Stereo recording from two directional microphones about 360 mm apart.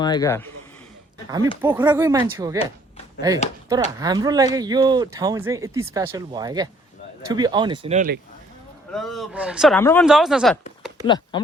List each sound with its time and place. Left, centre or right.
0.0 s speech: centre
1.6 s speech: centre; by 8.2 s right
8.9 s speech: centre
11.0 s speech: centre